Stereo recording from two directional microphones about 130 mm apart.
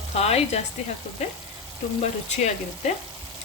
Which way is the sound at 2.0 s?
60° left (ahead or behind).